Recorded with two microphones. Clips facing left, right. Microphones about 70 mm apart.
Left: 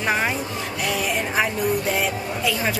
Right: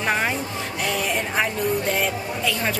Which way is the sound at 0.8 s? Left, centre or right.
Centre.